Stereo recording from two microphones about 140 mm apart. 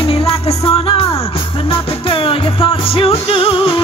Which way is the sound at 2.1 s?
40° left (ahead or behind).